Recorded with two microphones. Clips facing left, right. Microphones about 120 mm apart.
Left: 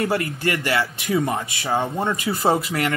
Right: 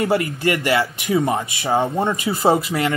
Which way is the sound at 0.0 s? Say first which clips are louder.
Right 3 dB; 25° right (ahead or behind).